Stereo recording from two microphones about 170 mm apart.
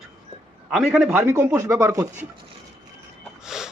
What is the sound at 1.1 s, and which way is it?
Speech, 10° right (ahead or behind).